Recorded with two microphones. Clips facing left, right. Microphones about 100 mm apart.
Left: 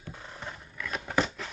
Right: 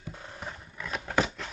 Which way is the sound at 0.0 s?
10° right (ahead or behind).